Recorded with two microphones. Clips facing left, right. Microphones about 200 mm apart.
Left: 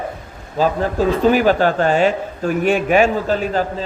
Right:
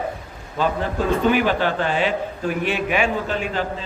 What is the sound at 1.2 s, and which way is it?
A man's voice, 40° left (ahead or behind).